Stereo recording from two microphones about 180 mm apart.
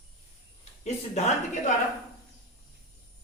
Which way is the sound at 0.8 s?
40° left (ahead or behind).